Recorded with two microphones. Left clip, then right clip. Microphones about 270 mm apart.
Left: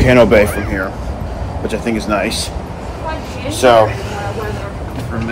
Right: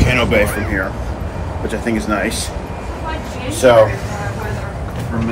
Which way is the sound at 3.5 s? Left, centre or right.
Centre.